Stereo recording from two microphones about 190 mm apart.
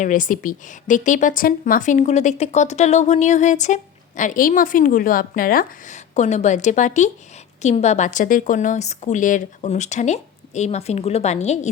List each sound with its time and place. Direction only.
0.0 s a woman's voice: 45° left (ahead or behind)